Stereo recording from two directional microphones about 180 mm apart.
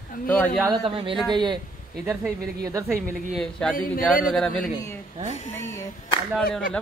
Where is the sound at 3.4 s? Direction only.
5° left (ahead or behind).